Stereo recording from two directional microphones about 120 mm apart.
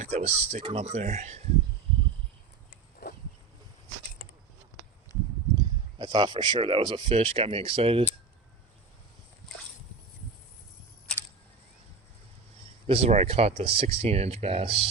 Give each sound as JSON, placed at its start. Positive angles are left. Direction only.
{"t": 0.0, "sound": "speech", "side_deg": -70}
{"t": 0.7, "sound": "speech", "side_deg": -60}
{"t": 6.0, "sound": "speech", "side_deg": -35}
{"t": 7.2, "sound": "speech", "side_deg": -55}
{"t": 12.9, "sound": "speech", "side_deg": -60}